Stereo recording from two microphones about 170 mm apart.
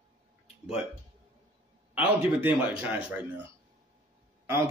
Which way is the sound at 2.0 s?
10° right (ahead or behind).